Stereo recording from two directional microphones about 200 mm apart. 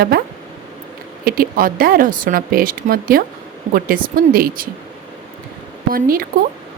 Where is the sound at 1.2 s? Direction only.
45° right (ahead or behind).